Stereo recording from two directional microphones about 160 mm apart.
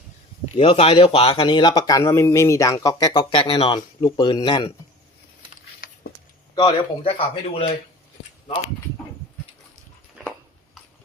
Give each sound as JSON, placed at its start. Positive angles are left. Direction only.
{"t": 0.5, "sound": "speech", "side_deg": 35}
{"t": 6.6, "sound": "speech", "side_deg": 30}